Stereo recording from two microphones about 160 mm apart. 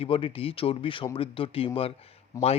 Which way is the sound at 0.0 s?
35° left (ahead or behind).